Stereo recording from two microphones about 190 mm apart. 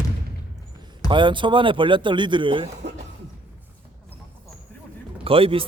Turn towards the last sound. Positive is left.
turn(degrees=-30)  # may be behind; listen again after turning